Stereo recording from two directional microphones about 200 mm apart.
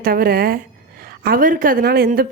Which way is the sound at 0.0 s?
45° right (ahead or behind).